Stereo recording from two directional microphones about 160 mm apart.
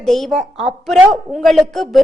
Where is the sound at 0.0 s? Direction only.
Centre (ahead or behind).